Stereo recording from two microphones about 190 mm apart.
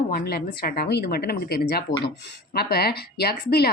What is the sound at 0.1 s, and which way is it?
Speech, 55° left (ahead or behind).